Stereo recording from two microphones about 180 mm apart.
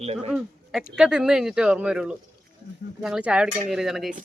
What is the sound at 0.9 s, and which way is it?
Speech, 5° right (ahead or behind).